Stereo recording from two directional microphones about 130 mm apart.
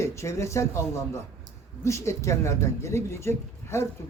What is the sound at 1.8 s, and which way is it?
Speech, 20° left (ahead or behind).